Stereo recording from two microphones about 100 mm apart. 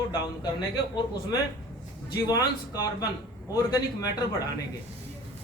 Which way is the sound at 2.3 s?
40° left (ahead or behind).